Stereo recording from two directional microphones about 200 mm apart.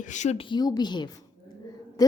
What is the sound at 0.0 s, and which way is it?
A woman's voice, 35° left (ahead or behind).